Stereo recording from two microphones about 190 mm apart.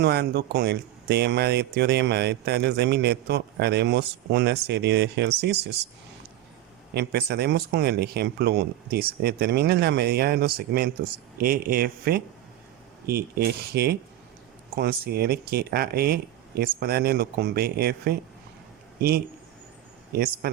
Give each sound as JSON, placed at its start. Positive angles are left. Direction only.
{"t": 0.0, "sound": "speech", "side_deg": -60}
{"t": 6.9, "sound": "speech", "side_deg": -55}